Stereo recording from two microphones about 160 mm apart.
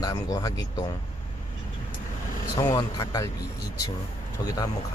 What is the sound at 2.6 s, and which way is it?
Speech, 20° left (ahead or behind).